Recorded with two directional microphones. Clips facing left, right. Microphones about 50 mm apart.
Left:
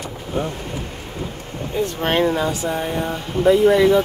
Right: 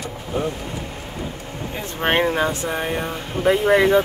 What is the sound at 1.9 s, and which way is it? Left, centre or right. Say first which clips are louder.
Speech: right 1 dB; right.